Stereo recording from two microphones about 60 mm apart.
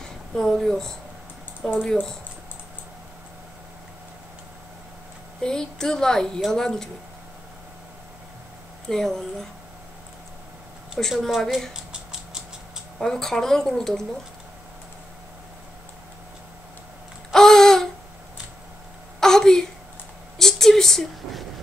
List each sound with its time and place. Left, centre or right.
0.0 s a woman's voice: centre
5.4 s a woman's voice: centre
8.8 s a woman's voice: centre
11.0 s a woman's voice: centre
11.7 s rodents: centre
13.0 s a woman's voice: centre
17.3 s a sound: centre
19.1 s a sound: centre
20.3 s speech: centre